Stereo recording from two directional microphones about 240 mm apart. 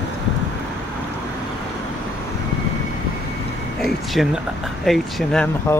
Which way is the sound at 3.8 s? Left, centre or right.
Centre.